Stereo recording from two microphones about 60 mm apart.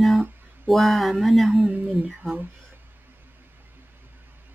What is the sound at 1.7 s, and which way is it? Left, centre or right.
Speech, right.